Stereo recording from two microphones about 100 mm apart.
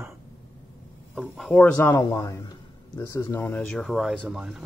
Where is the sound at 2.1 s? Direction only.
30° left (ahead or behind).